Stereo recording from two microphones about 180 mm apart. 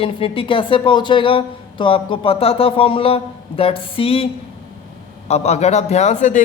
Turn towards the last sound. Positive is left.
turn(degrees=45)  # may be behind; listen again after turning